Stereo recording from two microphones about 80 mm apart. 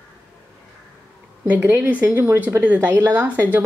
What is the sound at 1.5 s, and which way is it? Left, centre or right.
A woman's voice, right.